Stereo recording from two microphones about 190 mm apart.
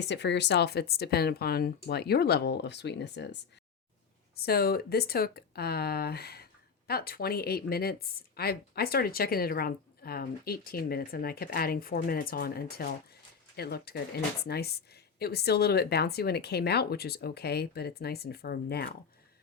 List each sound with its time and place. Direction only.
0.0 s speech: 65° left (ahead or behind)
4.4 s speech: 55° left (ahead or behind)